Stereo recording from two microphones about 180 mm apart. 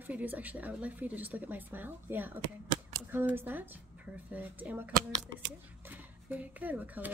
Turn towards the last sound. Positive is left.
turn(degrees=-10)  # may be behind; listen again after turning